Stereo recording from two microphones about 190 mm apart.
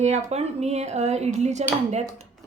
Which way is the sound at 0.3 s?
35° right (ahead or behind).